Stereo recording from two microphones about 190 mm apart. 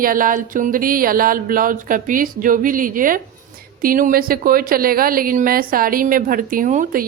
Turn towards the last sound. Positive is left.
turn(degrees=-45)  # may be behind; listen again after turning